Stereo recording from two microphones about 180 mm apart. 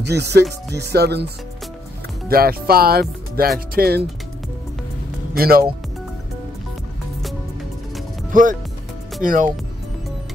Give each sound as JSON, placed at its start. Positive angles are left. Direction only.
{"t": 0.0, "sound": "speech", "side_deg": -65}
{"t": 0.7, "sound": "music", "side_deg": -65}
{"t": 2.2, "sound": "speech", "side_deg": -55}
{"t": 3.5, "sound": "music", "side_deg": -55}
{"t": 5.3, "sound": "music", "side_deg": -55}
{"t": 8.3, "sound": "speech", "side_deg": -45}